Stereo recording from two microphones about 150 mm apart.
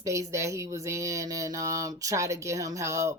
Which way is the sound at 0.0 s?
20° right (ahead or behind).